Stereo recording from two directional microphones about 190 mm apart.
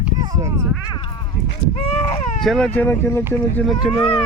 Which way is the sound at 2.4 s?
5° left (ahead or behind).